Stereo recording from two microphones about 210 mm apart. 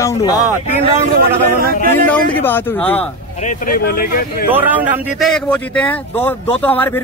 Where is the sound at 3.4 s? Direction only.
40° left (ahead or behind).